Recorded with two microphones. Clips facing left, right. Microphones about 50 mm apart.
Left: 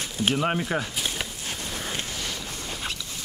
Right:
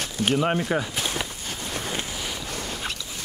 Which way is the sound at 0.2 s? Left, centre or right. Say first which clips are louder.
Right 2 dB; centre.